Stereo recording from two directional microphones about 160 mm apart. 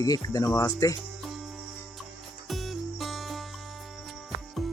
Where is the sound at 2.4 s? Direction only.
Centre (ahead or behind).